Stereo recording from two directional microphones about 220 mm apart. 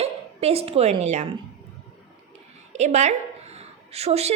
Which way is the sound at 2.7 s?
30° right (ahead or behind).